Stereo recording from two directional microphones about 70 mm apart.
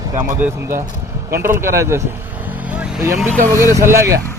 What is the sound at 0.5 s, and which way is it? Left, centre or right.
A man's voice, right.